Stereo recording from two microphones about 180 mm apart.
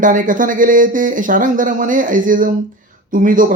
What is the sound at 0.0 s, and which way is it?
Speech, 45° right (ahead or behind).